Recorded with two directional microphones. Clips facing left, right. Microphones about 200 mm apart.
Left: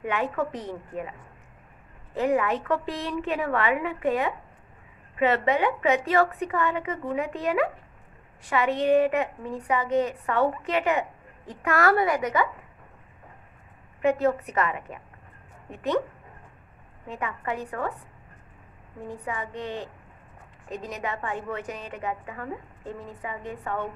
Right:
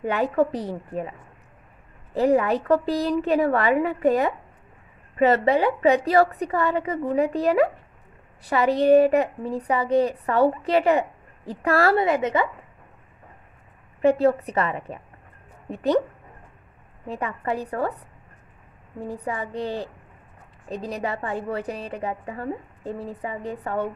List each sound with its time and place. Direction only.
0.0 s a woman's voice: 35° right (ahead or behind)
2.1 s a woman's voice: 35° right (ahead or behind)
14.0 s a woman's voice: 30° right (ahead or behind)
17.1 s a woman's voice: 35° right (ahead or behind)